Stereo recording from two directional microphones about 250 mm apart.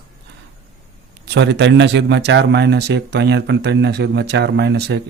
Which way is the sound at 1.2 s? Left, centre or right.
Right.